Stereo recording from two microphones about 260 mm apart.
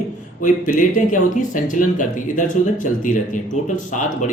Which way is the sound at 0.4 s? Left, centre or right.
Left.